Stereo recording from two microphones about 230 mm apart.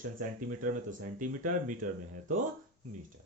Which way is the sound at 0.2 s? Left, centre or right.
Right.